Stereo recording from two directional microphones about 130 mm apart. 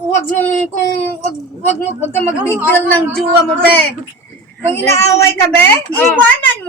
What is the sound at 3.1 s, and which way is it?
Speech, 5° left (ahead or behind).